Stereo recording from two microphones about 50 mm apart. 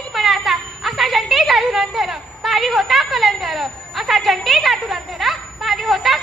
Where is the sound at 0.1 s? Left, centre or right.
Centre.